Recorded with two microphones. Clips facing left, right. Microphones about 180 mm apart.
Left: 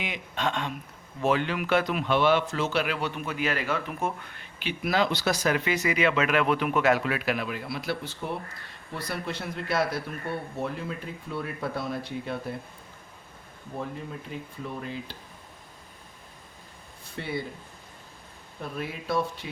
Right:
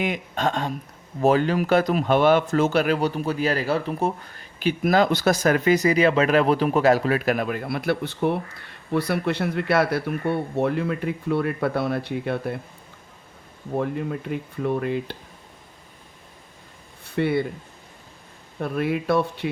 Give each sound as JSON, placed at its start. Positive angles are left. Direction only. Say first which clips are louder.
{"t": 0.0, "sound": "speech", "louder": "right 6 dB", "side_deg": -45}
{"t": 13.7, "sound": "speech", "louder": "right 10 dB", "side_deg": -65}
{"t": 17.2, "sound": "speech", "louder": "right 11 dB", "side_deg": -65}
{"t": 18.6, "sound": "speech", "louder": "right 10 dB", "side_deg": -65}